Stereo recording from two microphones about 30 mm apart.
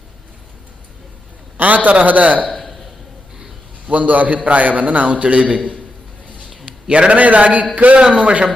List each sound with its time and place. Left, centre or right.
1.5 s a man's voice: right
3.8 s a man's voice: right
5.2 s a man's voice: right
7.1 s a man's voice: right